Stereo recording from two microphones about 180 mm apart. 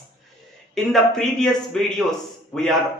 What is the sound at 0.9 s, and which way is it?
A man's voice, centre (ahead or behind).